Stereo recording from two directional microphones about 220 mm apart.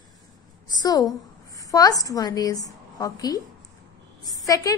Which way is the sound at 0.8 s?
15° left (ahead or behind).